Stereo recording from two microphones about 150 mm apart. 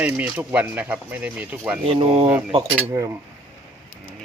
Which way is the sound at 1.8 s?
35° right (ahead or behind).